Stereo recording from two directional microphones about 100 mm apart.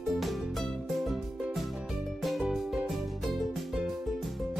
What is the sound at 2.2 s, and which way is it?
Music, centre (ahead or behind).